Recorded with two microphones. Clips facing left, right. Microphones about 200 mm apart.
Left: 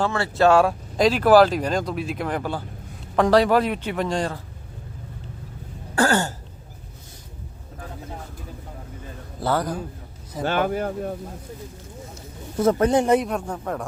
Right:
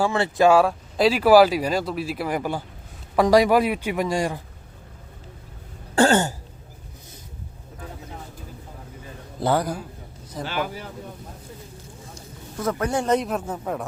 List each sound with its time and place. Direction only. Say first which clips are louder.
0.0 s speech: right 1 dB; 15° right (ahead or behind)
6.0 s throat clearing: right 3 dB; 20° right (ahead or behind)
9.4 s speech: right 1 dB; 15° right (ahead or behind)
10.4 s speech: left 7 dB; 55° left (ahead or behind)
12.5 s speech: left 6 dB; 25° left (ahead or behind)
13.1 s speech: left 2 dB; centre (ahead or behind)